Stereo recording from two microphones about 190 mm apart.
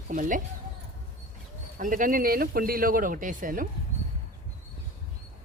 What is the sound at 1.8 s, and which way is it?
Speech, 45° right (ahead or behind).